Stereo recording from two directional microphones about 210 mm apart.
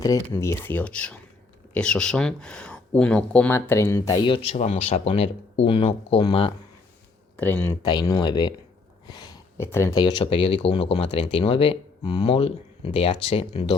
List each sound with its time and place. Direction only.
0.0 s speech: 15° left (ahead or behind)
7.3 s speech: 10° left (ahead or behind); by 13.7 s 30° left (ahead or behind)